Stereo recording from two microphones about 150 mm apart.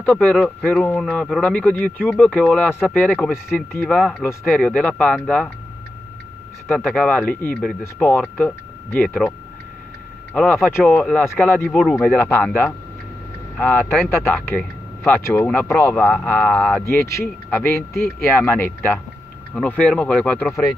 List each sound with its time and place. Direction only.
0.0 s speech: 5° left (ahead or behind)
6.7 s speech: 10° left (ahead or behind)
10.3 s speech: 5° left (ahead or behind)
13.7 s speech: 10° left (ahead or behind)
16.8 s speech: 20° left (ahead or behind)